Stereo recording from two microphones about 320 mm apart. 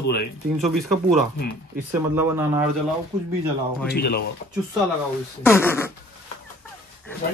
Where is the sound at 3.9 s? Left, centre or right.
Left.